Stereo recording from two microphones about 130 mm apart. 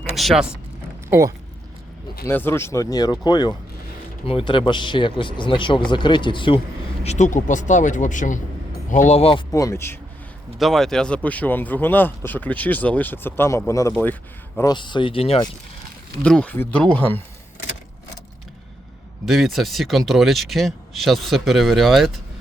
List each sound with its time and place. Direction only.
0.2 s speech: centre (ahead or behind)
2.2 s speech: 15° left (ahead or behind); by 6.6 s 40° left (ahead or behind)
7.0 s speech: 60° left (ahead or behind)
9.5 s speech: 25° left (ahead or behind)
10.6 s speech: centre (ahead or behind); by 13.9 s 25° left (ahead or behind)
13.9 s speech: 10° left (ahead or behind)
14.6 s speech: 35° left (ahead or behind)
16.2 s speech: 10° left (ahead or behind)
19.2 s speech: centre (ahead or behind)